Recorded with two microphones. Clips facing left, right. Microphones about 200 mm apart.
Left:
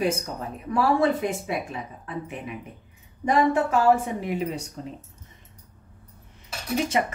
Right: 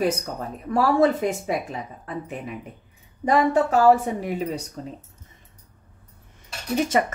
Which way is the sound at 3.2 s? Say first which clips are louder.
Right 2 dB; 40° right (ahead or behind).